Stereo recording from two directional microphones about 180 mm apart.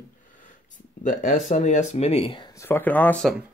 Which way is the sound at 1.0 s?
45° left (ahead or behind).